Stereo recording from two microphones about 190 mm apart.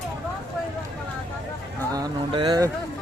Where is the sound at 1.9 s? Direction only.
20° right (ahead or behind).